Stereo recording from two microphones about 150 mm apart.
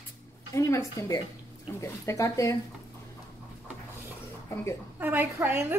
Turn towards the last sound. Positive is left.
turn(degrees=-10)  # may be behind; listen again after turning